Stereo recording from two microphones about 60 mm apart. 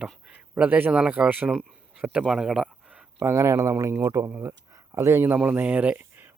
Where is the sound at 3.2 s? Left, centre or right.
Right.